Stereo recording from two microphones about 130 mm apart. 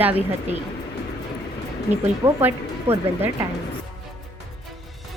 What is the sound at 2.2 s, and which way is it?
A woman's voice, 20° right (ahead or behind).